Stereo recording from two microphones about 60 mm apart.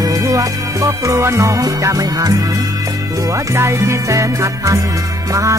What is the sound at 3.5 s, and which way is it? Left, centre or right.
Music, right.